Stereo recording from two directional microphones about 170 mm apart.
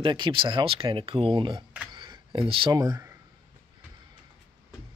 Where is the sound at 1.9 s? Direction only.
25° right (ahead or behind).